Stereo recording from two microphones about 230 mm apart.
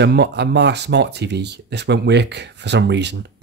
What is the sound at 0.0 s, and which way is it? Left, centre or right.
Speech, right.